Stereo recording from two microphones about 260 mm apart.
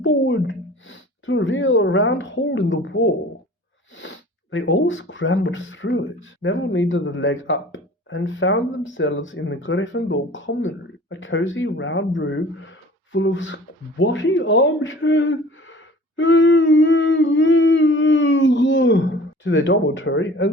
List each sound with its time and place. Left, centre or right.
0.0 s speech: left
4.5 s speech: left